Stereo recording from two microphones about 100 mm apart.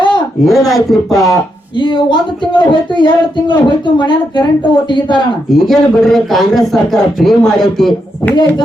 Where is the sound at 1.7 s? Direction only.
50° left (ahead or behind).